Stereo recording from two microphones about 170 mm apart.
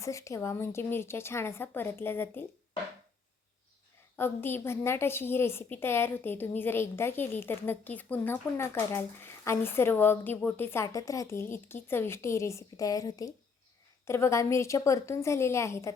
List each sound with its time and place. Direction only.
0.0 s a woman's voice: 20° left (ahead or behind)
4.2 s a woman's voice: 15° left (ahead or behind)